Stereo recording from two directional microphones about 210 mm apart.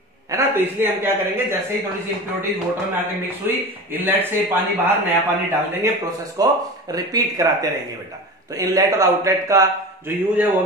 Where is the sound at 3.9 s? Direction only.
10° right (ahead or behind).